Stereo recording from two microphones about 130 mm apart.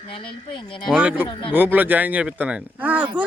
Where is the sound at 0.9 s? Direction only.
10° right (ahead or behind).